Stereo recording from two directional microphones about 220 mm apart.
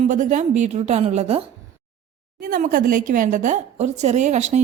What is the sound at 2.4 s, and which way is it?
A woman's voice, 40° right (ahead or behind).